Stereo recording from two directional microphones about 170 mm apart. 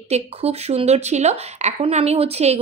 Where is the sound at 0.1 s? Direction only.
40° right (ahead or behind).